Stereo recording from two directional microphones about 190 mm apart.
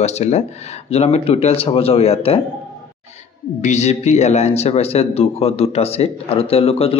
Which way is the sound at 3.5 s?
35° left (ahead or behind).